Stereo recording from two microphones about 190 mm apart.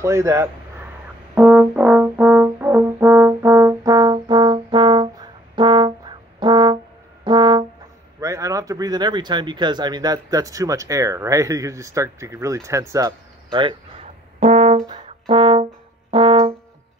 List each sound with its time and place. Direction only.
0.0 s speech: 15° right (ahead or behind)
1.3 s french horn: 5° right (ahead or behind); by 6.8 s 25° right (ahead or behind)
7.2 s brass instrument: 25° right (ahead or behind)
8.2 s speech: 15° right (ahead or behind)
14.0 s brass instrument: 35° right (ahead or behind)